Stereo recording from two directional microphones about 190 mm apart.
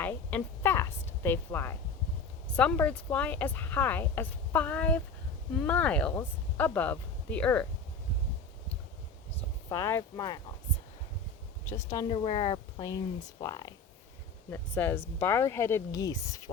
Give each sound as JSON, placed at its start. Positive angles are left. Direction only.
{"t": 0.0, "sound": "a sound", "side_deg": 10}
{"t": 2.6, "sound": "speech", "side_deg": 10}
{"t": 9.6, "sound": "speech", "side_deg": 15}
{"t": 11.6, "sound": "speech", "side_deg": 15}
{"t": 14.5, "sound": "speech", "side_deg": 10}